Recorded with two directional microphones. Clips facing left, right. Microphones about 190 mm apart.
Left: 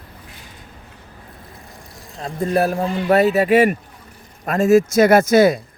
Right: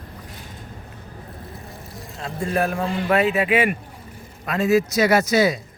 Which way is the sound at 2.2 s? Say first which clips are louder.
Left 4 dB; 40° left (ahead or behind).